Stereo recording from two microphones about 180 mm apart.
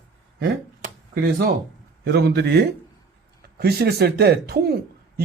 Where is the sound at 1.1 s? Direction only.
55° right (ahead or behind).